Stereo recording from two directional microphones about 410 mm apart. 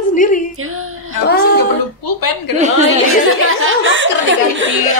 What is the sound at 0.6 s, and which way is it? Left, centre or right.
Music, right.